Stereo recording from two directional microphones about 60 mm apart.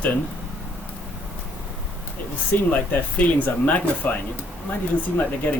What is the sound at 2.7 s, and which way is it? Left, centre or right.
Speech, left.